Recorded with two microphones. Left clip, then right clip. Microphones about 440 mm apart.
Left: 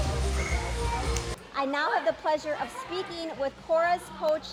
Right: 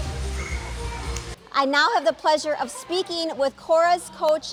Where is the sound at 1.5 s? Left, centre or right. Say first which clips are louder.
Right 8 dB; right.